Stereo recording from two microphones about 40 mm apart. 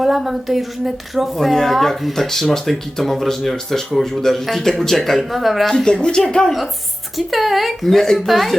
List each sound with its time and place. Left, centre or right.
0.3 s speech: centre
5.7 s speech: left
7.2 s speech: centre